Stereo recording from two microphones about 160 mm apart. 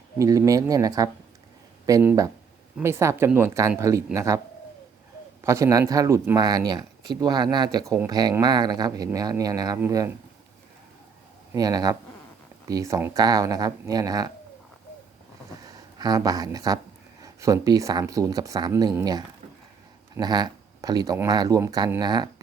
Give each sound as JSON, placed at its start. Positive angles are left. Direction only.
{"t": 0.2, "sound": "speech", "side_deg": -20}
{"t": 5.4, "sound": "speech", "side_deg": -20}
{"t": 11.5, "sound": "speech", "side_deg": -25}
{"t": 16.0, "sound": "speech", "side_deg": -25}